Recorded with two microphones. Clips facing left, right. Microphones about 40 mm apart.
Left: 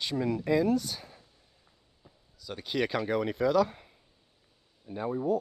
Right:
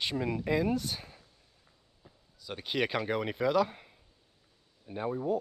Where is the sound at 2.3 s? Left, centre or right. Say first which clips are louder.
Left 1 dB; right.